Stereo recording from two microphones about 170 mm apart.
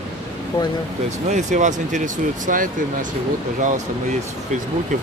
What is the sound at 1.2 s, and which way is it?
Speech, 45° right (ahead or behind).